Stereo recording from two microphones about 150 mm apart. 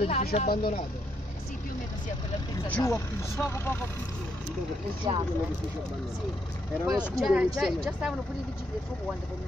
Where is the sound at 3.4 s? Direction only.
15° left (ahead or behind).